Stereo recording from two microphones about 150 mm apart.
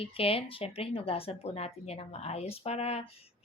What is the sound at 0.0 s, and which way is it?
A woman's voice, 40° left (ahead or behind).